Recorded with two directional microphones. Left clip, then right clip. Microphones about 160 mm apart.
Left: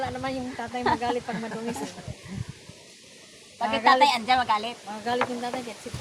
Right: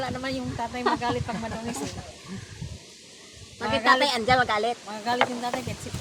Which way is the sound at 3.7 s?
15° left (ahead or behind).